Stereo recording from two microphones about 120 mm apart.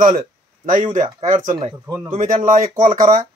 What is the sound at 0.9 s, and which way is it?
Speech, 90° right.